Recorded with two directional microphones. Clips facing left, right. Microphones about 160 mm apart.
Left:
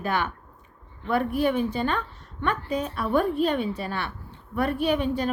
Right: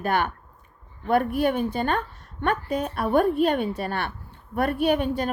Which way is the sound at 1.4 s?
50° right (ahead or behind).